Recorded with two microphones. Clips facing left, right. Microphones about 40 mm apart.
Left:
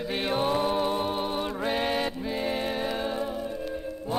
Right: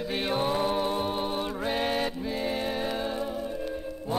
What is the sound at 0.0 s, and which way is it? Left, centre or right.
Music, centre.